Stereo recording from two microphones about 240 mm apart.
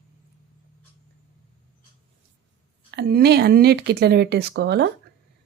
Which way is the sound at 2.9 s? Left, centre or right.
Right.